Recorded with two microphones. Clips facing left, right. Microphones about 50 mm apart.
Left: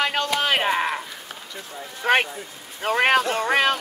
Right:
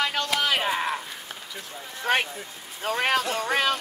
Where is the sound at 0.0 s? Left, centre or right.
Left.